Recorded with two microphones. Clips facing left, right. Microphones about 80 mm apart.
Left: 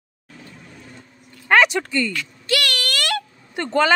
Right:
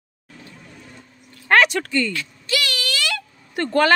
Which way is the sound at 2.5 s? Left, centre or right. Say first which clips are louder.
Left 2 dB; left.